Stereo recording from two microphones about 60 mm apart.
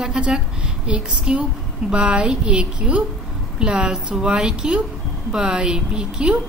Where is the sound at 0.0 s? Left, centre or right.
Centre.